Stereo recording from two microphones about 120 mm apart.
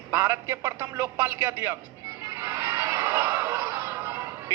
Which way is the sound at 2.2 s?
25° right (ahead or behind).